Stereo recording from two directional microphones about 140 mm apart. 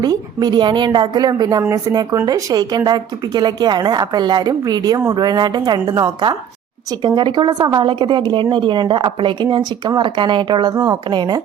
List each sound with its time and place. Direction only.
0.0 s a woman's voice: 30° right (ahead or behind)